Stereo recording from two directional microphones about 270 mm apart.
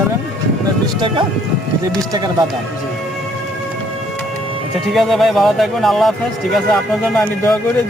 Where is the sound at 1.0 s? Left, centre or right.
Centre.